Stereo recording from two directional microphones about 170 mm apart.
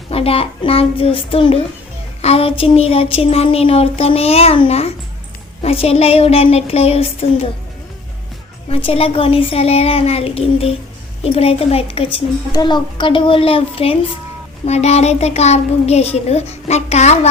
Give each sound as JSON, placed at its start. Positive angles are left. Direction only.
{"t": 0.1, "sound": "a woman's voice", "side_deg": 35}
{"t": 8.7, "sound": "a woman's voice", "side_deg": 35}